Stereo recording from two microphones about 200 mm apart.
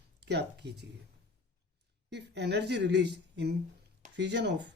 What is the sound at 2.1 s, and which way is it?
Speech, 60° right (ahead or behind).